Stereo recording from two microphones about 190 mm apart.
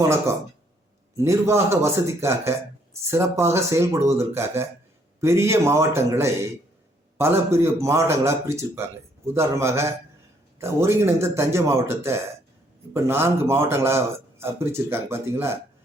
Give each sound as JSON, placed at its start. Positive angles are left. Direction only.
{"t": 0.0, "sound": "a man's voice", "side_deg": -15}